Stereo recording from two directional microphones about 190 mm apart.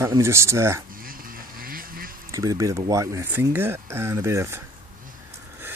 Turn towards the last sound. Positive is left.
turn(degrees=-15)  # may be behind; listen again after turning